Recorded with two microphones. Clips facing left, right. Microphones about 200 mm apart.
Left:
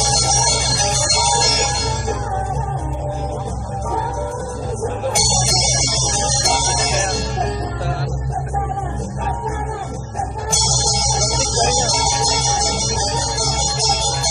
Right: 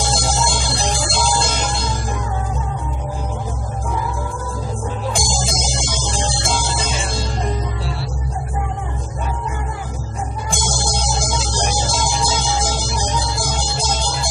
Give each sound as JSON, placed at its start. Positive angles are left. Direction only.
{"t": 0.0, "sound": "music", "side_deg": -35}
{"t": 5.2, "sound": "music", "side_deg": -35}
{"t": 10.8, "sound": "music", "side_deg": -35}